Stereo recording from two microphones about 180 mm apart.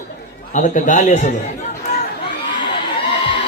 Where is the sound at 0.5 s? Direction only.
45° left (ahead or behind).